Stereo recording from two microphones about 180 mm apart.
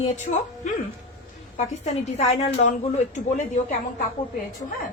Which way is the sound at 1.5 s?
35° left (ahead or behind).